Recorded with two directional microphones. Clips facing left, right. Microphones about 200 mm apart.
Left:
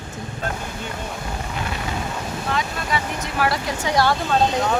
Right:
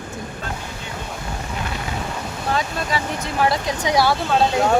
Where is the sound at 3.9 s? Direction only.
10° right (ahead or behind).